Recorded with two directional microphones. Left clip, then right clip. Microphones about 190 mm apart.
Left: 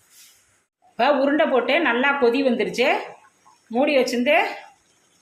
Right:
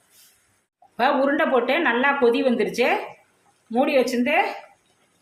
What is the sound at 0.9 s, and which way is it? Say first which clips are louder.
A woman's voice: left 1 dB; centre (ahead or behind).